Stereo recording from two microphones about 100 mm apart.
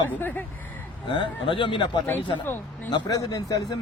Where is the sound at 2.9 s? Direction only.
40° left (ahead or behind).